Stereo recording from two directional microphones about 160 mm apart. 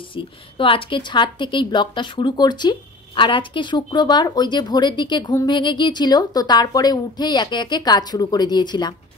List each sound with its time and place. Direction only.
0.1 s a woman's voice: 30° left (ahead or behind)